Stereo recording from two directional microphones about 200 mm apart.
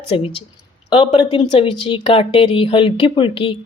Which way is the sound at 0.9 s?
25° left (ahead or behind).